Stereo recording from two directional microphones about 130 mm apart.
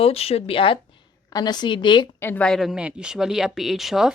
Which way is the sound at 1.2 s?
30° left (ahead or behind).